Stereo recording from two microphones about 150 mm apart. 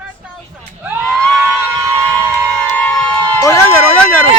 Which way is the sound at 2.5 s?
5° left (ahead or behind).